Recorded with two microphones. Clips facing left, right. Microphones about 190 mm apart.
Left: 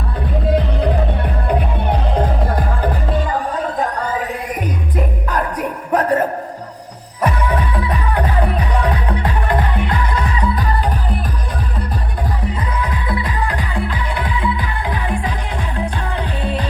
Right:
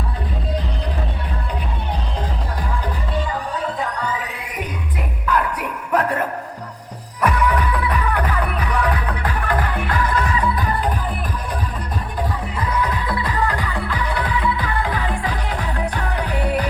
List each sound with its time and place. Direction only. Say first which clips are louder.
1.5 s music: left 10 dB; 60° left (ahead or behind)
5.3 s music: right 2 dB; 40° left (ahead or behind)
12.7 s music: even; 25° left (ahead or behind)
16.4 s music: right 2 dB; 25° left (ahead or behind)